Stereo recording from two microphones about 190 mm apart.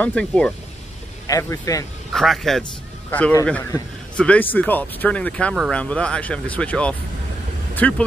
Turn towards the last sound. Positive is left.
turn(degrees=5)  # may be behind; listen again after turning